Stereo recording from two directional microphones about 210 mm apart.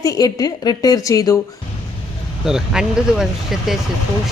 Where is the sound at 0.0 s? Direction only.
15° left (ahead or behind).